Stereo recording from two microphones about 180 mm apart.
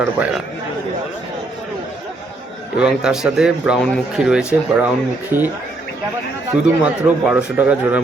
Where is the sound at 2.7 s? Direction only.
5° right (ahead or behind).